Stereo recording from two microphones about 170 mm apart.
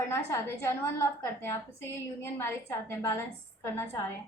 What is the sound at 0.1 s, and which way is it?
A woman's voice, 15° left (ahead or behind).